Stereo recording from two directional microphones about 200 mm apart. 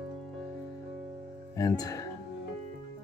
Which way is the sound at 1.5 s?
15° left (ahead or behind).